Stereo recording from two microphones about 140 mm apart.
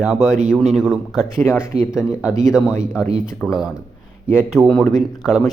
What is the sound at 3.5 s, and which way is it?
Speech, 5° right (ahead or behind).